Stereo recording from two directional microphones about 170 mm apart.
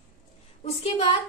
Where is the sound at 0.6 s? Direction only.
35° left (ahead or behind).